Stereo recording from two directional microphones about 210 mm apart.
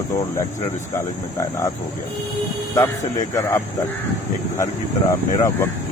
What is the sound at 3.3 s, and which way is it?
Speech, 15° left (ahead or behind).